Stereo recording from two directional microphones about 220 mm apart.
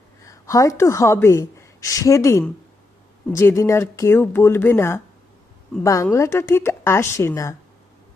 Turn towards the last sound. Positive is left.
turn(degrees=10)  # may be behind; listen again after turning